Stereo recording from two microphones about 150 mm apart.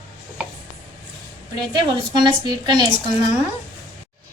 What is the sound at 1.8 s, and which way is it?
A woman's voice, 25° right (ahead or behind).